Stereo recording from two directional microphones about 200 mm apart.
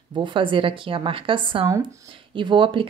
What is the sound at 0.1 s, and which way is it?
Speech, 25° right (ahead or behind).